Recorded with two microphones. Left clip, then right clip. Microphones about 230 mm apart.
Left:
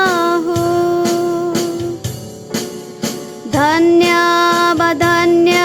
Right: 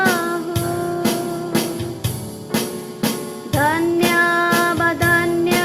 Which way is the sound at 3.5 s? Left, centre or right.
Left.